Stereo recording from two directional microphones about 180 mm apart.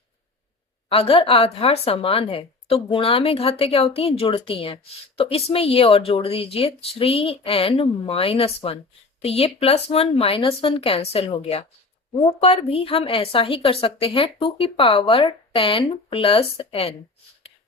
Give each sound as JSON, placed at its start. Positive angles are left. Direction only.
{"t": 0.9, "sound": "a woman's voice", "side_deg": 30}